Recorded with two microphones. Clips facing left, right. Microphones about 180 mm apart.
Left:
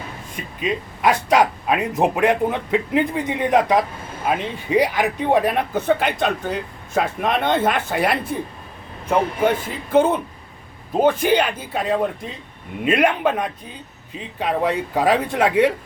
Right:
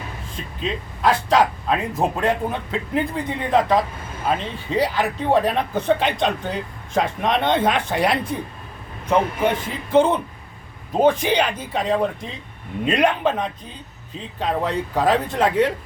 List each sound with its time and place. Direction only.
0.3 s speech: 15° left (ahead or behind)
9.9 s speech: 5° left (ahead or behind)